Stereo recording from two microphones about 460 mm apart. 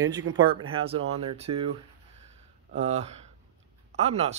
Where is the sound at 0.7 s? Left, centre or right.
Centre.